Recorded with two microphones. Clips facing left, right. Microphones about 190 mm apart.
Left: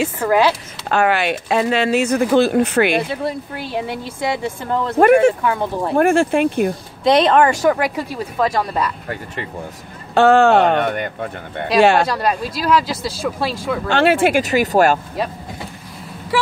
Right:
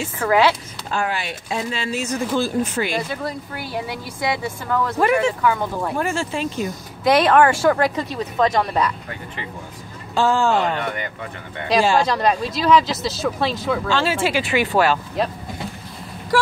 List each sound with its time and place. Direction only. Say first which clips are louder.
0.2 s speech: even; 15° left (ahead or behind)
0.8 s speech: left 8 dB; 70° left (ahead or behind)
3.1 s speech: left 4 dB; 25° left (ahead or behind)
4.9 s speech: left 9 dB; 55° left (ahead or behind)
5.4 s speech: left 1 dB; 25° left (ahead or behind)
5.9 s speech: left 13 dB; 55° left (ahead or behind)
7.1 s speech: left 2 dB; 20° left (ahead or behind); by 8.9 s 5° left (ahead or behind)
10.1 s speech: left 7 dB; 65° left (ahead or behind)
12.1 s speech: even; 5° left (ahead or behind)
13.8 s speech: left 9 dB; 60° left (ahead or behind); by 15.0 s 45° left (ahead or behind)